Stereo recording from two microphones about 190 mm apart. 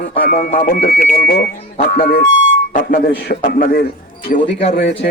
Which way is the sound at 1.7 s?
45° left (ahead or behind).